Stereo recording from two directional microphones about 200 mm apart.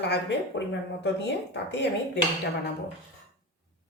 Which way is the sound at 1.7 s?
60° left (ahead or behind).